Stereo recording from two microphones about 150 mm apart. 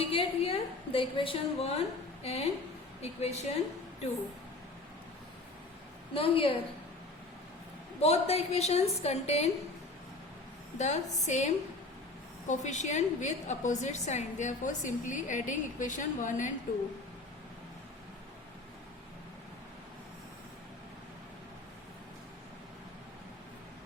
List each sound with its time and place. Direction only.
0.0 s a woman's voice: 40° left (ahead or behind)
6.1 s a woman's voice: 40° left (ahead or behind)
8.0 s a woman's voice: 45° left (ahead or behind)
10.8 s a woman's voice: 50° left (ahead or behind)